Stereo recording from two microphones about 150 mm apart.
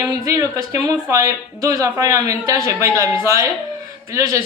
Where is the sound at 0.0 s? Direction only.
20° right (ahead or behind).